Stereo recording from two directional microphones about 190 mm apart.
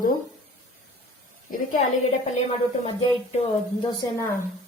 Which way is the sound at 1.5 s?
45° left (ahead or behind).